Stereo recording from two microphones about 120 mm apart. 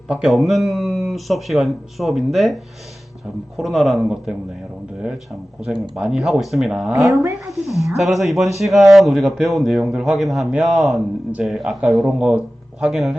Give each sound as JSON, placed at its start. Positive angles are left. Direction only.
{"t": 0.1, "sound": "speech", "side_deg": -5}
{"t": 3.6, "sound": "speech", "side_deg": 0}
{"t": 7.1, "sound": "speech", "side_deg": -25}
{"t": 7.8, "sound": "speech", "side_deg": 0}